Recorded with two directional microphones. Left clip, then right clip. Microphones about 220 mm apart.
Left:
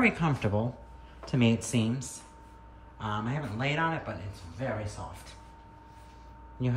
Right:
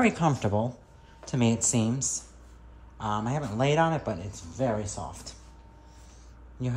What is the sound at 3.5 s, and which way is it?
Speech, 15° right (ahead or behind).